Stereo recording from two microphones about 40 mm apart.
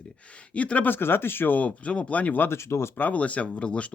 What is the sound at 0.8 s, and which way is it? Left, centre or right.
Speech, left.